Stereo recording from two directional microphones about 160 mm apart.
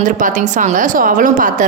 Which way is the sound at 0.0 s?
55° right (ahead or behind).